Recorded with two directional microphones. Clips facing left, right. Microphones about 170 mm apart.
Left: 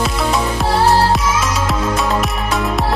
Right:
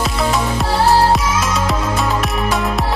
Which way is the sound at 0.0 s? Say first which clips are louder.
Even; centre (ahead or behind).